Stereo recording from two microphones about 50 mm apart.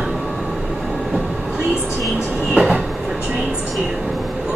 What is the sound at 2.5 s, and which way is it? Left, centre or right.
Train, centre.